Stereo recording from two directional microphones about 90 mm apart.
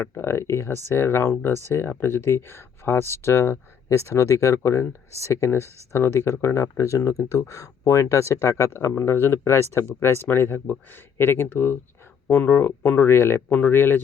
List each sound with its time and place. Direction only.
0.0 s speech: 30° left (ahead or behind)